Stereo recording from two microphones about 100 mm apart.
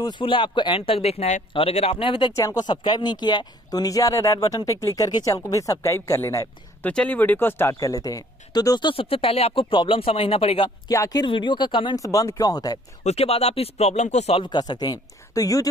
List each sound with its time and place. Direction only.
0.1 s speech: 60° left (ahead or behind)
2.3 s speech: 30° left (ahead or behind)
2.6 s speech: 50° left (ahead or behind); by 6.4 s 25° left (ahead or behind)
6.8 s speech: 15° left (ahead or behind); by 8.9 s 45° left (ahead or behind)
8.9 s speech: 70° left (ahead or behind)
10.9 s speech: 35° left (ahead or behind)
11.2 s speech: 55° left (ahead or behind)
11.9 s speech: 35° left (ahead or behind)
13.1 s speech: 90° left
14.4 s speech: 45° left (ahead or behind)